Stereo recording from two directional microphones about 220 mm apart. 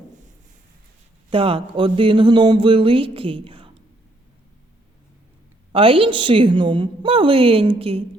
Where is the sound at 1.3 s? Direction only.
25° right (ahead or behind).